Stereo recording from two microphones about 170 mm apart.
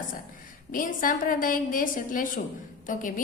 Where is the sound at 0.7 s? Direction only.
55° left (ahead or behind).